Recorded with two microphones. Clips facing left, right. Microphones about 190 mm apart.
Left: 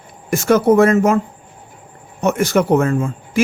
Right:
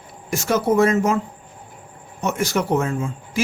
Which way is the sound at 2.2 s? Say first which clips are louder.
Left 6 dB; 55° left (ahead or behind).